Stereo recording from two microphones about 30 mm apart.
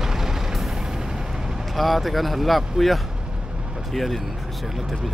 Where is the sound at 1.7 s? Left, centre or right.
Centre.